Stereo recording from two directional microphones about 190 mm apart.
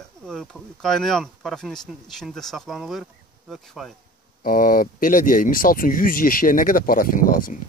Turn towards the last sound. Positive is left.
turn(degrees=45)  # may be behind; listen again after turning